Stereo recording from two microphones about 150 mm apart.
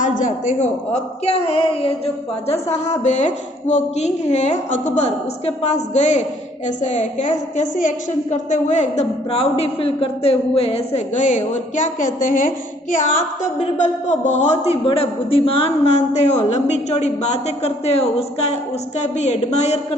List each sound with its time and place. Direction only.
0.0 s a man's voice: 60° left (ahead or behind)
13.4 s a man's voice: 55° left (ahead or behind)